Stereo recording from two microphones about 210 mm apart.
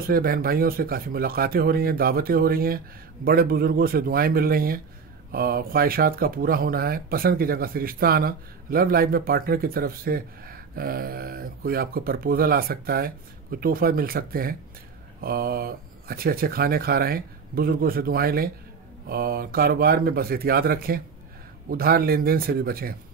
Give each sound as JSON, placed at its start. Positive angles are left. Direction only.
{"t": 0.0, "sound": "speech", "side_deg": -45}